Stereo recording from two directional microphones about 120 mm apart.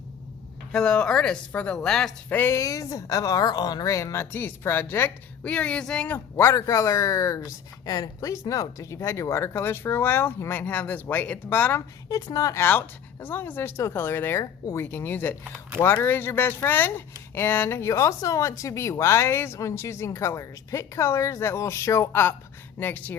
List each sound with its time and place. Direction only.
0.7 s speech: 10° left (ahead or behind)
2.4 s speech: 25° left (ahead or behind); by 6.1 s 10° left (ahead or behind)
6.1 s speech: 20° left (ahead or behind)
12.0 s speech: 30° left (ahead or behind)
12.6 s speech: 15° left (ahead or behind)